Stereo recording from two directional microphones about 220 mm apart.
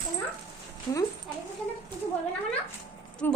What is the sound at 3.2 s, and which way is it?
Speech, 10° left (ahead or behind).